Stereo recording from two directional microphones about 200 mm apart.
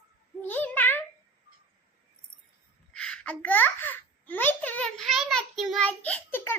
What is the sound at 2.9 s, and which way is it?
A child's voice, 5° left (ahead or behind).